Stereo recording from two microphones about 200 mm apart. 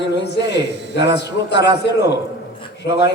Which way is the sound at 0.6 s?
60° right (ahead or behind).